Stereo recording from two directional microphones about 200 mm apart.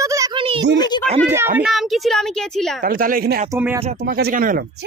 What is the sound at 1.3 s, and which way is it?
Speech, centre (ahead or behind).